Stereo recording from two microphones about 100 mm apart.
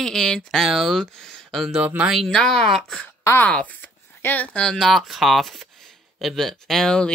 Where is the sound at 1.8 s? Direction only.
15° right (ahead or behind).